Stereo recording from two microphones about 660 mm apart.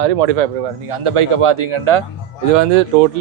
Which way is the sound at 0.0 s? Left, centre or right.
Right.